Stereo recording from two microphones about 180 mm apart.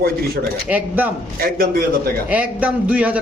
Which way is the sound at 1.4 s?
55° right (ahead or behind).